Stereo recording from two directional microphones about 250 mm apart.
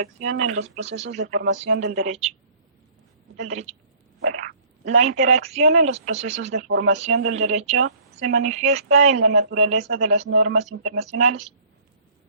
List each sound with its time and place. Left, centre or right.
0.0 s speech: right
3.3 s speech: right
4.9 s speech: right